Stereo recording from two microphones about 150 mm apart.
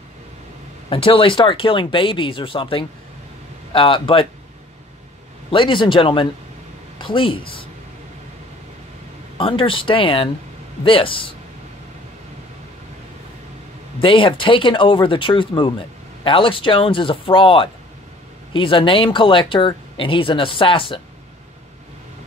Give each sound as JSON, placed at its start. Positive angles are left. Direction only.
{"t": 0.8, "sound": "speech", "side_deg": 35}
{"t": 5.5, "sound": "speech", "side_deg": 35}
{"t": 9.4, "sound": "speech", "side_deg": 35}
{"t": 14.0, "sound": "speech", "side_deg": 35}